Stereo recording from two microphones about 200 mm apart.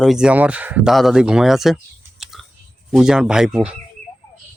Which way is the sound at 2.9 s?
5° right (ahead or behind).